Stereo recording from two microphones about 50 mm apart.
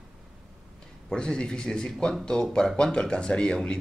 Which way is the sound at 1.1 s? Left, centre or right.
Centre.